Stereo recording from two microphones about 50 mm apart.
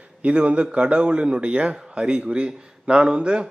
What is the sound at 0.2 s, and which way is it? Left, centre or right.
A man's voice, right.